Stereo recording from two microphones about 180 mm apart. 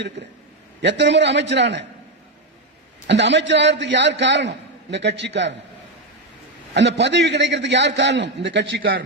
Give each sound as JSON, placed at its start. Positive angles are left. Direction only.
{"t": 0.2, "sound": "a man's voice", "side_deg": -75}
{"t": 3.1, "sound": "a man's voice", "side_deg": -75}
{"t": 6.7, "sound": "a man's voice", "side_deg": -75}